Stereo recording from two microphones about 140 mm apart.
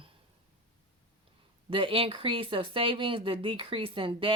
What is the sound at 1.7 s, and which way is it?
Speech, 40° right (ahead or behind).